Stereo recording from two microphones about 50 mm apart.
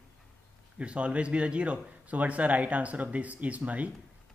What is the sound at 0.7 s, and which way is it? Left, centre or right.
Speech, right.